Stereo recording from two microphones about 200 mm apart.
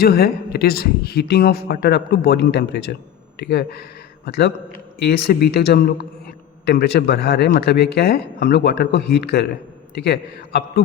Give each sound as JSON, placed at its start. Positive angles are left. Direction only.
{"t": 0.0, "sound": "a man's voice", "side_deg": 50}